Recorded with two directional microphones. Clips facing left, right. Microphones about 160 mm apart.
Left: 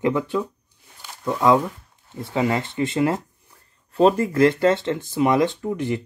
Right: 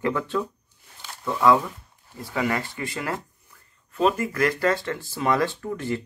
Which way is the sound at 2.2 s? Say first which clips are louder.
Left 4 dB; 25° left (ahead or behind).